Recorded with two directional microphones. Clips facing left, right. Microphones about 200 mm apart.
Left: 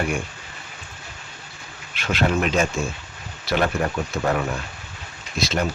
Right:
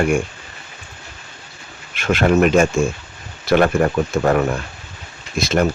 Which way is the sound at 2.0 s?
50° right (ahead or behind).